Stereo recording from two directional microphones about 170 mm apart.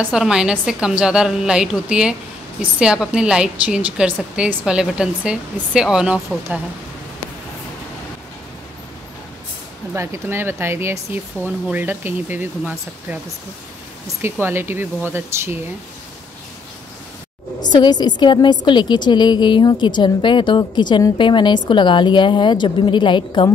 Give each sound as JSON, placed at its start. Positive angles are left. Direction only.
{"t": 0.0, "sound": "a woman's voice", "side_deg": -5}
{"t": 9.9, "sound": "speech", "side_deg": -15}
{"t": 14.2, "sound": "speech", "side_deg": -15}
{"t": 17.7, "sound": "a woman's voice", "side_deg": 25}